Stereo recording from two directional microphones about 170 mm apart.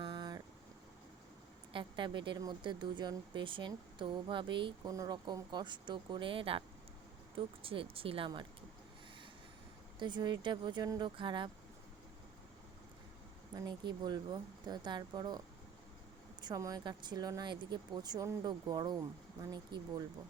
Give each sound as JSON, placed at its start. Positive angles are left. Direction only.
{"t": 0.0, "sound": "vehicle", "side_deg": -25}
{"t": 1.7, "sound": "speech", "side_deg": -30}
{"t": 10.0, "sound": "speech", "side_deg": -25}
{"t": 13.7, "sound": "speech", "side_deg": -25}
{"t": 16.4, "sound": "speech", "side_deg": -20}